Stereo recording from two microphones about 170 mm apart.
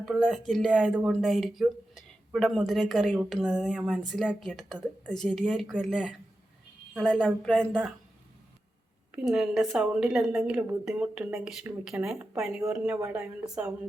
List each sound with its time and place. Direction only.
0.0 s speech: centre (ahead or behind)
7.7 s speech: 10° right (ahead or behind)
9.1 s speech: 5° right (ahead or behind)